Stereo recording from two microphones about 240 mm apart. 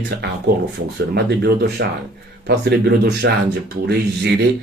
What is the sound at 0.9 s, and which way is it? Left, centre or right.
Speech, right.